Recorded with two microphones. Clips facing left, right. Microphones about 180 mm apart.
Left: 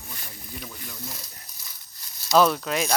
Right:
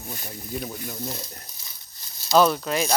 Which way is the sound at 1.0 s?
25° right (ahead or behind).